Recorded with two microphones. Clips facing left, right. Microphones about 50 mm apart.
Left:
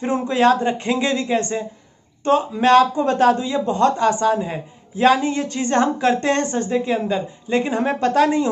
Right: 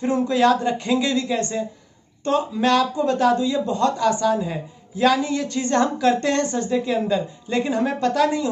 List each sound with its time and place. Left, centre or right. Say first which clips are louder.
0.0 s speech: left 1 dB; left
2.6 s speech: left 6 dB; left